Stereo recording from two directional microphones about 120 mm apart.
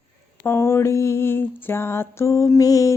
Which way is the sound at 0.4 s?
20° left (ahead or behind).